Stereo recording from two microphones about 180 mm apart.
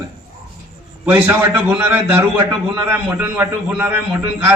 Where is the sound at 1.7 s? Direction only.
10° right (ahead or behind).